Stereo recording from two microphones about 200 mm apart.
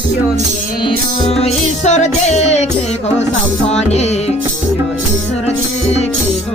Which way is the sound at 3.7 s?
35° left (ahead or behind).